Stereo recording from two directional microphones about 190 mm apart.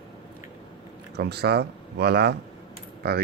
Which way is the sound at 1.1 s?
60° right (ahead or behind).